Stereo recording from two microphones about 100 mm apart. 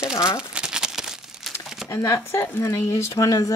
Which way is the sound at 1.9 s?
25° left (ahead or behind).